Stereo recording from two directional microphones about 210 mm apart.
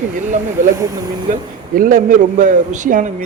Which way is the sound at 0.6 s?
35° right (ahead or behind).